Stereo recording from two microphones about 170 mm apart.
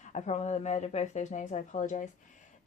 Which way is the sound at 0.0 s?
45° left (ahead or behind).